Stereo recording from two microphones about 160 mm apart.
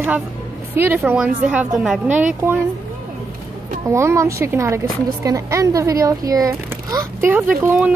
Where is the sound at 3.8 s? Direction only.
15° right (ahead or behind).